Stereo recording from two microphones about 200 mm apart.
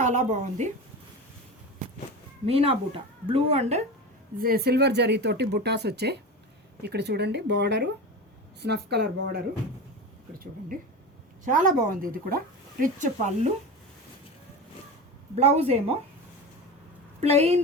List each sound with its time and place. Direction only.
0.0 s speech: 35° right (ahead or behind)
2.5 s speech: 30° right (ahead or behind)
4.4 s speech: 50° right (ahead or behind)
11.4 s speech: 40° right (ahead or behind)
15.4 s speech: 30° right (ahead or behind)
17.2 s speech: 30° right (ahead or behind)